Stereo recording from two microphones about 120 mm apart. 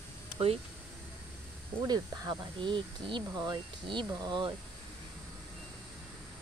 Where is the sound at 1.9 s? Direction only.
40° right (ahead or behind).